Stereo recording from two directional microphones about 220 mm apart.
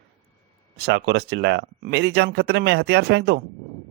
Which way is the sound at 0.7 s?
50° right (ahead or behind).